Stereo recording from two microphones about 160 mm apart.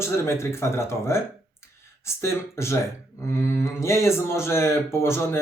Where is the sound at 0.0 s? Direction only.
15° left (ahead or behind).